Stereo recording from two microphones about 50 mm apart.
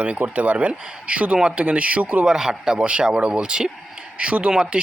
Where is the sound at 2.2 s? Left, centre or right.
Centre.